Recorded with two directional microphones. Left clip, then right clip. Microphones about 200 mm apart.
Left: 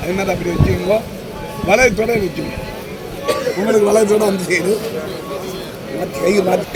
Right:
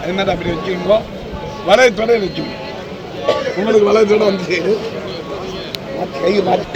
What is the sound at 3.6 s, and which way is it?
Speech, 35° left (ahead or behind).